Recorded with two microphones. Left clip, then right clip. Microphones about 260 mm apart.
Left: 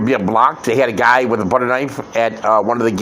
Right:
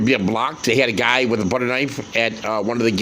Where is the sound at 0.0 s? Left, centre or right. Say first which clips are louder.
Left 6 dB; right.